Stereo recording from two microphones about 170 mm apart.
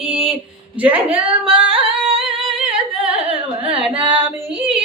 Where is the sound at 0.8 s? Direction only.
10° right (ahead or behind).